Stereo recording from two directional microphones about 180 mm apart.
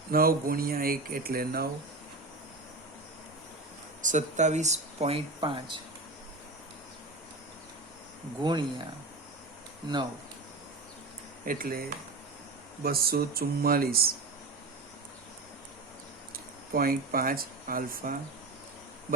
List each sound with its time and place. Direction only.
0.1 s speech: 55° right (ahead or behind)
4.0 s speech: 45° right (ahead or behind); by 5.7 s 30° right (ahead or behind)
8.4 s speech: 25° right (ahead or behind)
11.4 s speech: 50° right (ahead or behind)
12.8 s speech: 55° right (ahead or behind)
16.7 s speech: 55° right (ahead or behind)